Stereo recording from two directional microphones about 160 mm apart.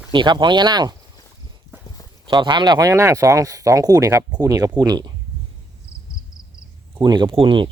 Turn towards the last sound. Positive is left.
turn(degrees=-35)  # may be behind; listen again after turning